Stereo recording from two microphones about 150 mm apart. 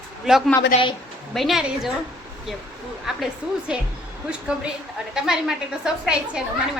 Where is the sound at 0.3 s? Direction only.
Centre (ahead or behind).